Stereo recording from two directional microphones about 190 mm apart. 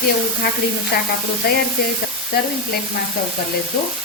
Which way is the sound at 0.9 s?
55° left (ahead or behind).